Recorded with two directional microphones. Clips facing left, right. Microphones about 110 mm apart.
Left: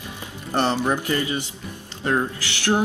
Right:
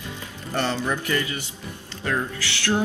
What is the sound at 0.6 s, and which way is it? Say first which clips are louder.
A man's voice: left 4 dB; 20° left (ahead or behind).